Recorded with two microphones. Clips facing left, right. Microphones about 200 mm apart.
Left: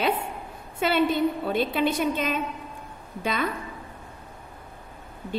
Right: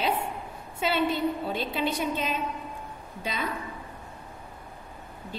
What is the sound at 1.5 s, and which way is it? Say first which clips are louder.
A woman's voice: left 5 dB; 55° left (ahead or behind).